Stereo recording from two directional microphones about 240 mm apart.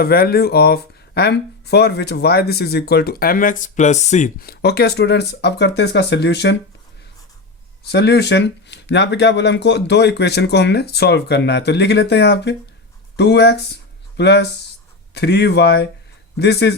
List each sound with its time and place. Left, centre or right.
0.0 s speech: left
7.9 s speech: left